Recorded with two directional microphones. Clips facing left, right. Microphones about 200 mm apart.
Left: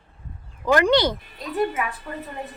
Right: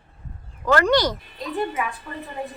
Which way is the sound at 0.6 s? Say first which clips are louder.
Left 1 dB; 15° left (ahead or behind).